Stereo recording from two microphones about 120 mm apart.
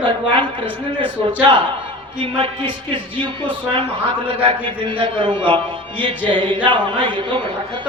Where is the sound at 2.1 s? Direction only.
45° right (ahead or behind).